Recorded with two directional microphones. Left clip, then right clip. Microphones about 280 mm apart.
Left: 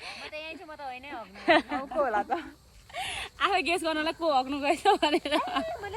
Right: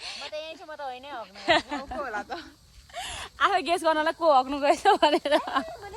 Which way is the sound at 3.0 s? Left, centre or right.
Centre.